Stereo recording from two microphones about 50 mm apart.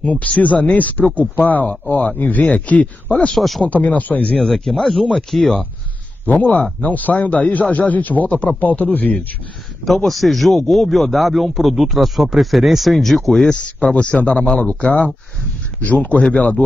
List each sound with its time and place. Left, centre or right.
0.0 s speech: left
3.3 s speech: centre
3.6 s speech: left
4.4 s speech: centre
6.2 s speech: left
9.8 s speech: centre
13.9 s speech: left